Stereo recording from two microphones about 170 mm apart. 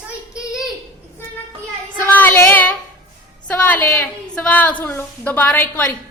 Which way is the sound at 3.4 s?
10° left (ahead or behind).